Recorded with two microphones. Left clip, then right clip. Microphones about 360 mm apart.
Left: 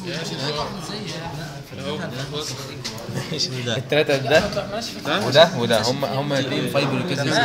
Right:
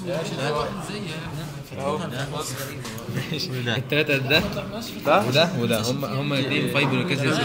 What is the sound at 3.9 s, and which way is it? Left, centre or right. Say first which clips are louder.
A man's voice: left 3 dB; centre.